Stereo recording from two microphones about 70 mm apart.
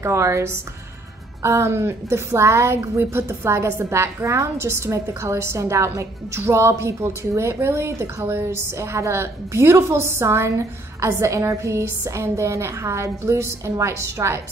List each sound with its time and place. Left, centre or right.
0.0 s a woman's voice: right